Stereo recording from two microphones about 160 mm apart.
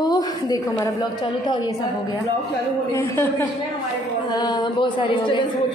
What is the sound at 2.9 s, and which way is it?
A woman's voice, 20° left (ahead or behind).